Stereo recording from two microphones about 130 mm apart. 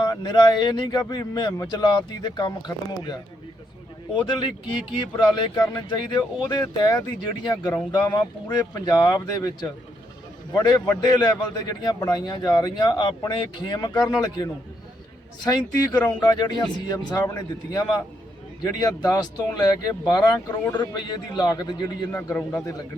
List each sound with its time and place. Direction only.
0.0 s a man's voice: 30° left (ahead or behind)
10.8 s a man's voice: 30° left (ahead or behind)
22.1 s a man's voice: 15° left (ahead or behind)